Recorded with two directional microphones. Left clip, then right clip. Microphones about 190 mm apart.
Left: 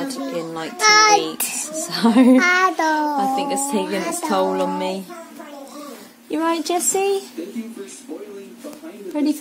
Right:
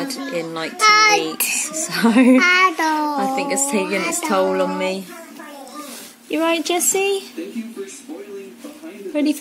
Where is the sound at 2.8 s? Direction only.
Centre (ahead or behind).